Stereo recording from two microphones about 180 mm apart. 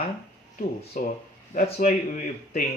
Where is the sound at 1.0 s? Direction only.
50° left (ahead or behind).